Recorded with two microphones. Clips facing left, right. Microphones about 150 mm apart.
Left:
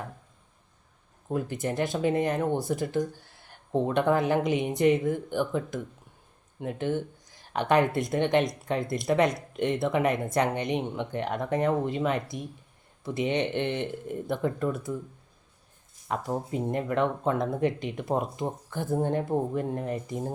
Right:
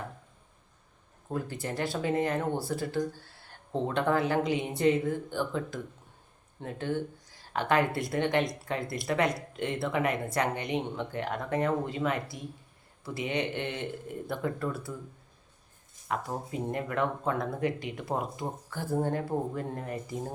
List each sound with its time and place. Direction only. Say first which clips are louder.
1.3 s speech: left 4 dB; 20° left (ahead or behind)
16.0 s speech: left 3 dB; 20° left (ahead or behind)